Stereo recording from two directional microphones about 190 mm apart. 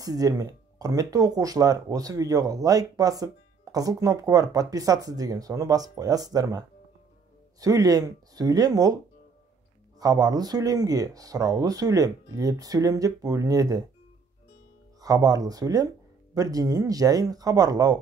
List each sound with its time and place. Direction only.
0.0 s speech: 20° right (ahead or behind)
7.6 s speech: 20° right (ahead or behind)
15.0 s speech: 20° right (ahead or behind)